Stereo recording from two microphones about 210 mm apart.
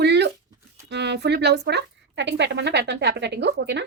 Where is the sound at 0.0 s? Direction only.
55° right (ahead or behind).